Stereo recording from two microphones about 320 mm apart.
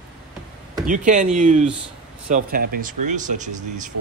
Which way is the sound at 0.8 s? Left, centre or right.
Right.